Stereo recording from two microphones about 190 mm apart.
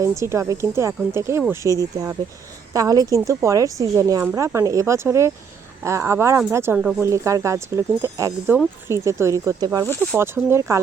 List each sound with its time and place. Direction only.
0.2 s a woman's voice: 15° right (ahead or behind)
9.8 s speech: 10° left (ahead or behind)
10.2 s a woman's voice: 15° right (ahead or behind)